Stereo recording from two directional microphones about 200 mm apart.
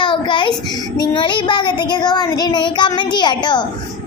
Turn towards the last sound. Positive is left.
turn(degrees=20)  # may be behind; listen again after turning